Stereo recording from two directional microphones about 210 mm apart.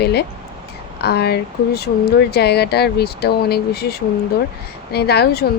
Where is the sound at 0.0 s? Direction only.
50° left (ahead or behind).